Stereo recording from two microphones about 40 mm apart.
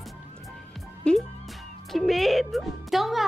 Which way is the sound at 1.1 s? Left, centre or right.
Left.